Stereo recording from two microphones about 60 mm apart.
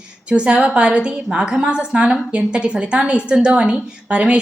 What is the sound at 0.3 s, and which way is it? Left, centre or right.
A woman's voice, centre.